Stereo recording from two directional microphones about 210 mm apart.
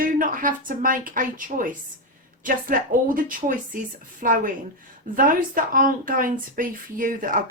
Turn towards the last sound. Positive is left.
turn(degrees=-40)  # may be behind; listen again after turning